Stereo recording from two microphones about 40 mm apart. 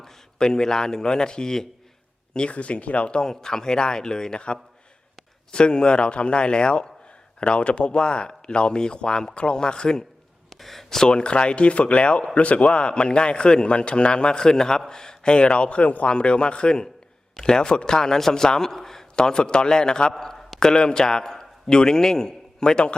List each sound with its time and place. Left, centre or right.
0.0 s speech: centre
2.5 s speech: left
3.2 s a man's voice: centre
10.6 s speech: centre
11.1 s a man's voice: left
16.1 s a man's voice: left